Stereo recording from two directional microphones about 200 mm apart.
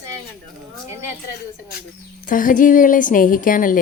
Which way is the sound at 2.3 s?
40° left (ahead or behind).